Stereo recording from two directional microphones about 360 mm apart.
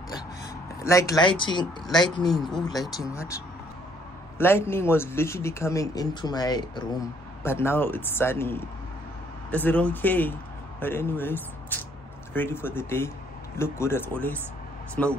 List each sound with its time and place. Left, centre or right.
0.7 s speech: centre
2.2 s speech: centre